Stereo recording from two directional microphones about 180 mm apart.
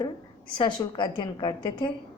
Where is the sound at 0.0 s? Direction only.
25° left (ahead or behind).